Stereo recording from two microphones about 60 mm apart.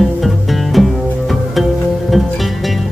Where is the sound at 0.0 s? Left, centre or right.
Centre.